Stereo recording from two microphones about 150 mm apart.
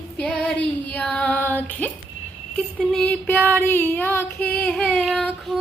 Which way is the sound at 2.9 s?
5° left (ahead or behind).